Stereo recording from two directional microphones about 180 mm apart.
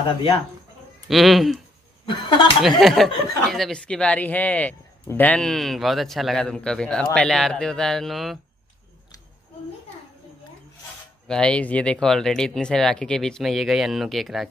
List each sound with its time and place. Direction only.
1.0 s speech: centre (ahead or behind)
2.0 s speech: 25° left (ahead or behind)
2.8 s speech: centre (ahead or behind)
11.2 s speech: 5° left (ahead or behind)